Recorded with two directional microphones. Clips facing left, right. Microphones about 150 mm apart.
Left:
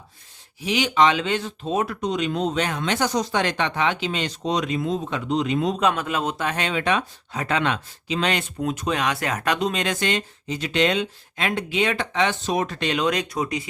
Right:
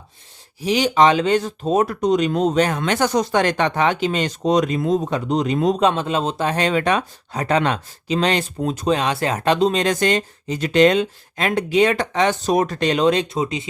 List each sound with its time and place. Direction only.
0.6 s speech: 35° right (ahead or behind)
5.8 s speech: 30° right (ahead or behind)